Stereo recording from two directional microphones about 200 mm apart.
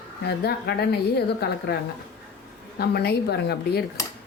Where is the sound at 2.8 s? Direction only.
55° left (ahead or behind).